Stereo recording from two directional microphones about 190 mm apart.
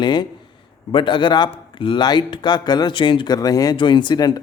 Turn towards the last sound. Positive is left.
turn(degrees=20)  # may be behind; listen again after turning